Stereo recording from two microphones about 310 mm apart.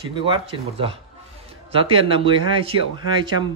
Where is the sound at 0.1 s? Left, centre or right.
Centre.